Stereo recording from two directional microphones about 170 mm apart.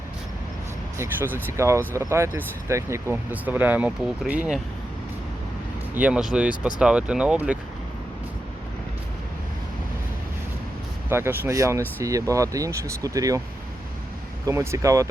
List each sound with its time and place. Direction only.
0.9 s speech: 15° right (ahead or behind)
5.9 s speech: 10° right (ahead or behind)
11.1 s speech: 15° right (ahead or behind)
14.4 s speech: 15° right (ahead or behind)